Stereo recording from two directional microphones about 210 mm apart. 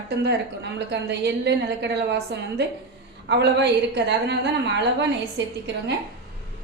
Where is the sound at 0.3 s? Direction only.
55° right (ahead or behind).